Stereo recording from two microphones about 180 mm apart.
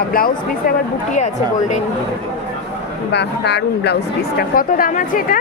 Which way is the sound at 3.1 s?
70° left (ahead or behind).